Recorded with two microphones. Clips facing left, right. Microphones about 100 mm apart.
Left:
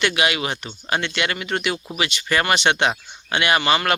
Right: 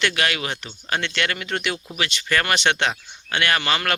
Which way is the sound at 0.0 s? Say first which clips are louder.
Left 2 dB; 15° left (ahead or behind).